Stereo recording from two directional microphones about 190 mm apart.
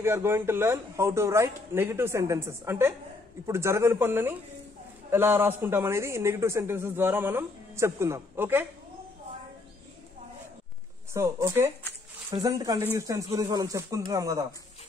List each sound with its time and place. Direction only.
0.0 s a man's voice: 15° right (ahead or behind)
11.1 s a man's voice: 15° right (ahead or behind)